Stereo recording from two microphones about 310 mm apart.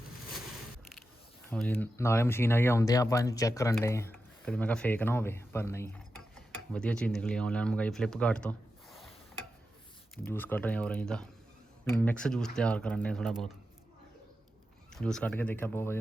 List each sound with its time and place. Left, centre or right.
1.5 s speech: centre
10.2 s speech: centre
14.9 s speech: centre